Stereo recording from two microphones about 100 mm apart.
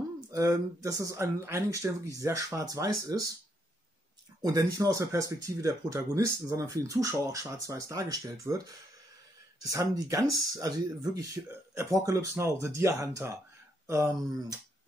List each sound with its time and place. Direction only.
0.3 s speech: 35° right (ahead or behind)
4.4 s speech: 35° right (ahead or behind)
9.7 s speech: 35° right (ahead or behind)
11.4 s speech: 20° right (ahead or behind)
11.7 s speech: 30° right (ahead or behind)